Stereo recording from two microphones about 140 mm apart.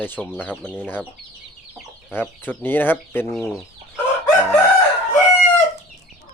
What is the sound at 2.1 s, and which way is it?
Speech, 15° left (ahead or behind).